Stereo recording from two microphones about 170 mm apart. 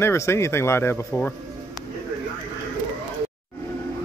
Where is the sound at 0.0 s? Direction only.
15° left (ahead or behind).